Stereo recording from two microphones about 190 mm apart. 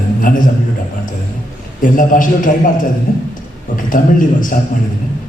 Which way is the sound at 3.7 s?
45° left (ahead or behind).